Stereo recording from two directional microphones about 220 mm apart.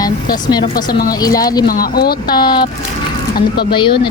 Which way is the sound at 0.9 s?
40° left (ahead or behind).